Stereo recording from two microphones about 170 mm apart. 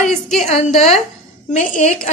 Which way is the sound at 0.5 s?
40° left (ahead or behind).